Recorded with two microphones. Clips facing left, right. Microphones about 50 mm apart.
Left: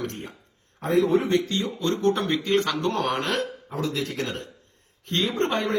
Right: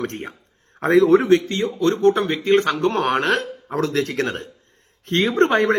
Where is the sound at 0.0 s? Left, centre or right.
Right.